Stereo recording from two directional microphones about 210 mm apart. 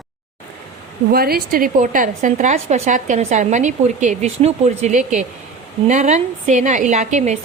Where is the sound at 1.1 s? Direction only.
45° right (ahead or behind).